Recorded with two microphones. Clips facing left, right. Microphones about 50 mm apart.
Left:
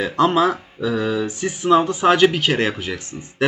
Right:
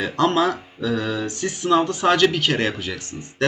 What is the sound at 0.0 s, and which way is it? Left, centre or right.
Speech, centre.